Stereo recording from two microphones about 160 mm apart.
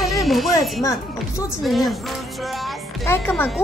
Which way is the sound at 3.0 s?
15° left (ahead or behind).